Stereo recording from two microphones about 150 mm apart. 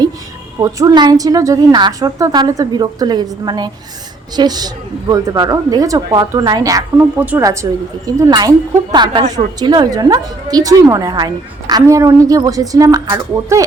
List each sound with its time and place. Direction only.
0.6 s a woman's voice: 25° right (ahead or behind)
7.2 s a woman's voice: 10° right (ahead or behind)
7.4 s a woman's voice: 20° right (ahead or behind)